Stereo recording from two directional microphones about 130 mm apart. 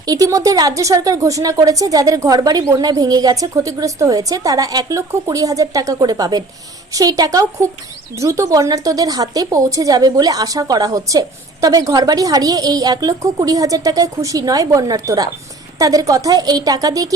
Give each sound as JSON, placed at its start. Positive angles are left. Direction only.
{"t": 0.0, "sound": "speech", "side_deg": -30}